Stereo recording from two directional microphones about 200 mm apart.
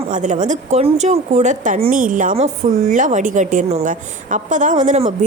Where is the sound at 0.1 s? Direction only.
40° right (ahead or behind).